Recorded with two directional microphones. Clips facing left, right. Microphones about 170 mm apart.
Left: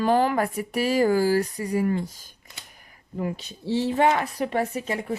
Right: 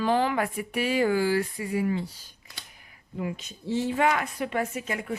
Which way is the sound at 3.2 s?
35° left (ahead or behind).